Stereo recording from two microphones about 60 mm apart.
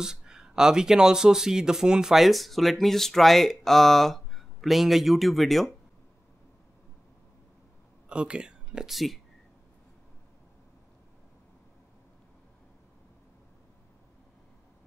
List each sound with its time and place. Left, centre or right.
0.0 s speech: centre
8.1 s speech: centre
8.8 s speech: centre